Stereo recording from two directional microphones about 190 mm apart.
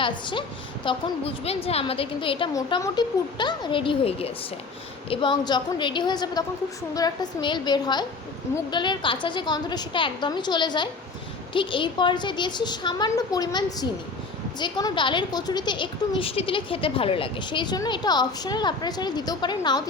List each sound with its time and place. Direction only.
0.0 s a woman's voice: 25° left (ahead or behind)